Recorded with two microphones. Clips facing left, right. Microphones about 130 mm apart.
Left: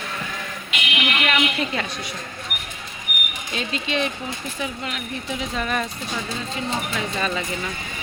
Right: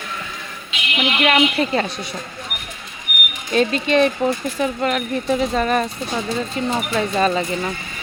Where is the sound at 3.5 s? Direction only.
50° right (ahead or behind).